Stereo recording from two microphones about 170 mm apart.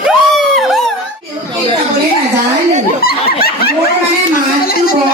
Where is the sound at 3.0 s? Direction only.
65° left (ahead or behind).